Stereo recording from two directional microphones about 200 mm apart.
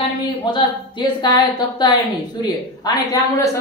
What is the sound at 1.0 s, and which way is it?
Speech, 20° left (ahead or behind).